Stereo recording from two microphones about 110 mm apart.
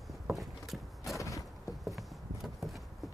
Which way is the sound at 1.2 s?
30° left (ahead or behind).